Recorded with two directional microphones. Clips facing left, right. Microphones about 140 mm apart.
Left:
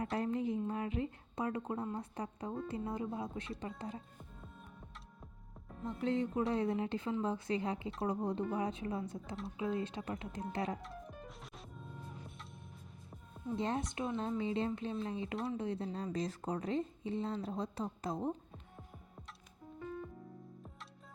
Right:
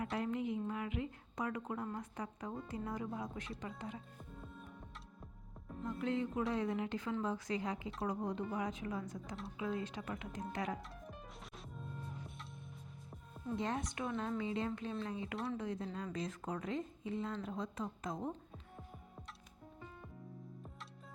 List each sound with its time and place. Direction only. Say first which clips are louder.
0.0 s a woman's voice: left 3 dB; 35° left (ahead or behind)
5.8 s a woman's voice: left 2 dB; 30° left (ahead or behind)
10.8 s music: left 3 dB; centre (ahead or behind)
13.6 s a woman's voice: left 3 dB; 30° left (ahead or behind)